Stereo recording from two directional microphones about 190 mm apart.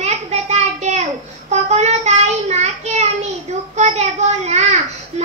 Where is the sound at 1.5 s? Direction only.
35° right (ahead or behind).